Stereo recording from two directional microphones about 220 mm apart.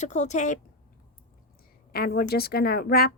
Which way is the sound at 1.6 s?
45° left (ahead or behind).